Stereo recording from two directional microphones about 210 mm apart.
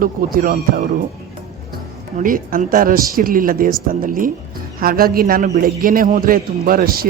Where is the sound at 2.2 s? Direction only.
40° right (ahead or behind).